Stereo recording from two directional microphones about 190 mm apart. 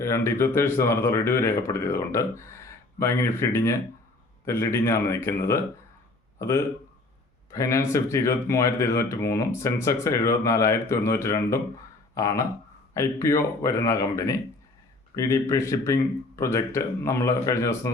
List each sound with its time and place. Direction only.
0.0 s speech: 15° left (ahead or behind)
7.5 s speech: 15° left (ahead or behind)